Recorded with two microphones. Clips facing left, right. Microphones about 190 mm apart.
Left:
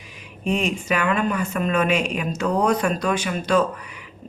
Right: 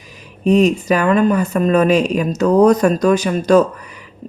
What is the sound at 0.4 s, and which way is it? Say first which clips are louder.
Speech: right 10 dB; 40° right (ahead or behind).